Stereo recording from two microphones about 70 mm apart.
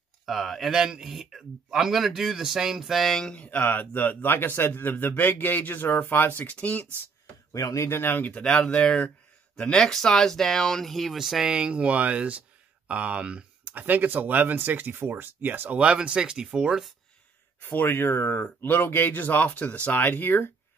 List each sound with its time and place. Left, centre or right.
0.2 s speech: centre; by 6.9 s left
7.5 s speech: left
8.5 s speech: centre
11.5 s speech: centre
15.8 s speech: centre
17.6 s speech: left